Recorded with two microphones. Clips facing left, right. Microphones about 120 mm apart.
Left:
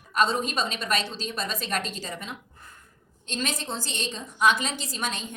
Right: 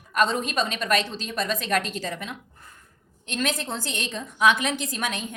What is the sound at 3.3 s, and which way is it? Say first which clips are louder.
A woman's voice: right 3 dB; 55° right (ahead or behind).